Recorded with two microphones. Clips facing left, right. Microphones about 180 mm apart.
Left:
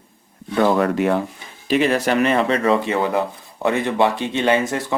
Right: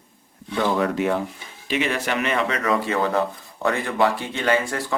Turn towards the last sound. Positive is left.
turn(degrees=20)  # may be behind; listen again after turning